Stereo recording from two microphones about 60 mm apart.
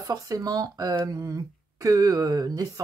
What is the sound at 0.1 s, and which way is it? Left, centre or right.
Speech, right.